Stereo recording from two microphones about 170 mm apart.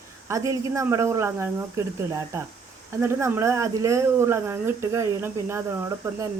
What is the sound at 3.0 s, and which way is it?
Speech, 15° right (ahead or behind).